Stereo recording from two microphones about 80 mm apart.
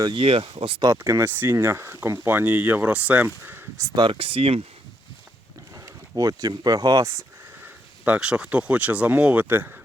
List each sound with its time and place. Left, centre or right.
0.1 s speech: right
0.9 s speech: right
3.9 s speech: right
5.7 s a sound: right
6.6 s speech: right
7.6 s speech: centre